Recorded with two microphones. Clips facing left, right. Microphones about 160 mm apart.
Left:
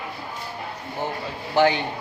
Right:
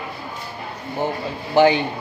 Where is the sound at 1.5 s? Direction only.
15° right (ahead or behind).